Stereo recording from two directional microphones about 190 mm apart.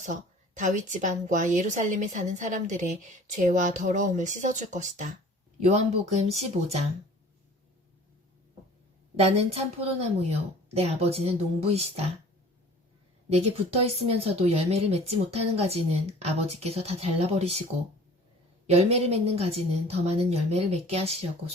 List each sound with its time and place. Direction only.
0.0 s a woman's voice: 40° right (ahead or behind)
9.1 s a woman's voice: 35° right (ahead or behind)
13.3 s a woman's voice: 35° right (ahead or behind)
18.7 s a woman's voice: 35° right (ahead or behind)